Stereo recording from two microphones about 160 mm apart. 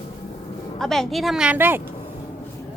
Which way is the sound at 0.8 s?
Centre (ahead or behind).